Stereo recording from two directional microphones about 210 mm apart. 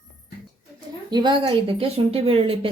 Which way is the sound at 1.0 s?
20° right (ahead or behind).